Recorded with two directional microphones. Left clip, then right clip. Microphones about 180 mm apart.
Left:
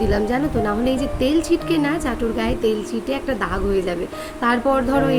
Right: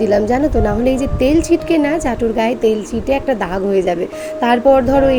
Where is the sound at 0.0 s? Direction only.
15° right (ahead or behind).